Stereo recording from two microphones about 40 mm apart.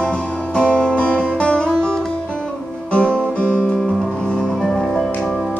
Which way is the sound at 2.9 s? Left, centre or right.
Left.